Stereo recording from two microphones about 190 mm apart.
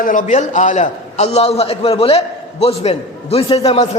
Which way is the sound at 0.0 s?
45° left (ahead or behind).